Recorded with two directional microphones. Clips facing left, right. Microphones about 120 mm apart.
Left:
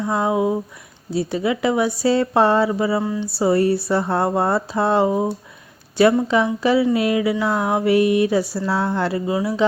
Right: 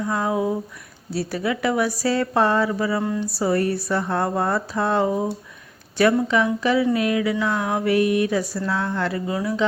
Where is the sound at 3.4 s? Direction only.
30° left (ahead or behind).